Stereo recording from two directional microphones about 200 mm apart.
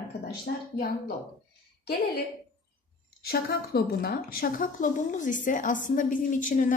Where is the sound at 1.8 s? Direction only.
55° left (ahead or behind).